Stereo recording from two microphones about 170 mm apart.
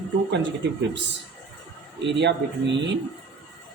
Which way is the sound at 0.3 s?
90° right.